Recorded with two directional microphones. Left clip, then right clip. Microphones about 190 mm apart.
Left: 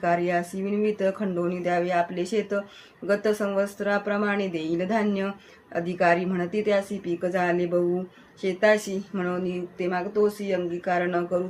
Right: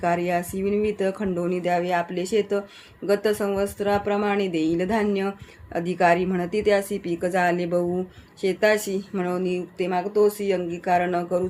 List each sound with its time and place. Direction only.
0.0 s speech: 45° right (ahead or behind)